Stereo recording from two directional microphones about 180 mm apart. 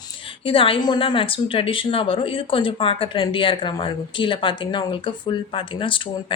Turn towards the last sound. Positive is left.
turn(degrees=30)  # may be behind; listen again after turning